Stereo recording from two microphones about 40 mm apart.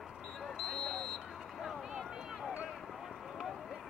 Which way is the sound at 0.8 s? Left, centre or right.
Centre.